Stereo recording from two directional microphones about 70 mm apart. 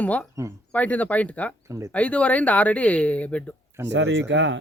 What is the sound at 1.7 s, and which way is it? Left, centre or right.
Speech, right.